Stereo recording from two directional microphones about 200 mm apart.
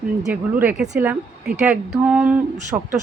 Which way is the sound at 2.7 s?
20° right (ahead or behind).